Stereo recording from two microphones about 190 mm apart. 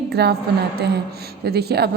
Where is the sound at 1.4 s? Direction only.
60° right (ahead or behind).